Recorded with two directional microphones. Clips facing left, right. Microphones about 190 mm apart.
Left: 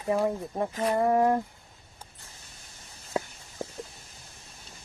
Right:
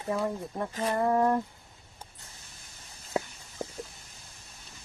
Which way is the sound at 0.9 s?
20° left (ahead or behind).